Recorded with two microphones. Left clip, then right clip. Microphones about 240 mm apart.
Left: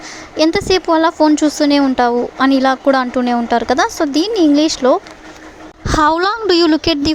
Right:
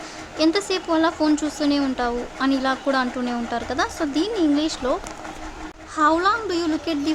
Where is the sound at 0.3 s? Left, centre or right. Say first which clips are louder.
Left 8 dB; left.